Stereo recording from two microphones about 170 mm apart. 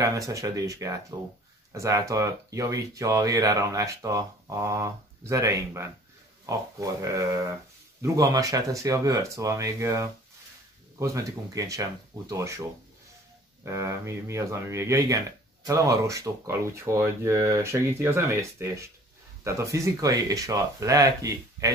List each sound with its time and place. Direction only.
0.0 s speech: 20° right (ahead or behind)
13.7 s speech: 15° right (ahead or behind)